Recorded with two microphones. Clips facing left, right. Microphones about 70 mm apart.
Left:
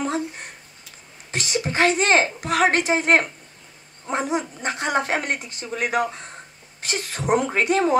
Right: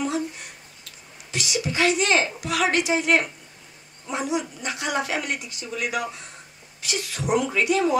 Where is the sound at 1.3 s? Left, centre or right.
Left.